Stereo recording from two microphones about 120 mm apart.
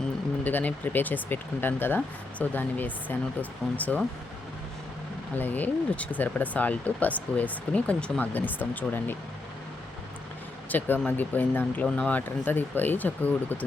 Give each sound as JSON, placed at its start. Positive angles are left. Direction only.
{"t": 0.4, "sound": "speech", "side_deg": 15}
{"t": 5.4, "sound": "speech", "side_deg": 15}
{"t": 10.7, "sound": "speech", "side_deg": 15}